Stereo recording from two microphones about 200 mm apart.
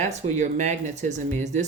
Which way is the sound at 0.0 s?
35° right (ahead or behind).